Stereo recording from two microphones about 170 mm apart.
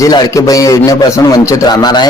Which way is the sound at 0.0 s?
20° left (ahead or behind).